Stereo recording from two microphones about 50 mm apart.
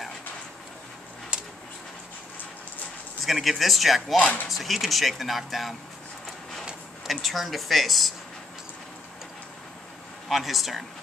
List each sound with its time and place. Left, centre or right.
3.3 s speech: centre
4.2 s speech: left
4.5 s speech: centre
7.1 s speech: centre
10.2 s speech: centre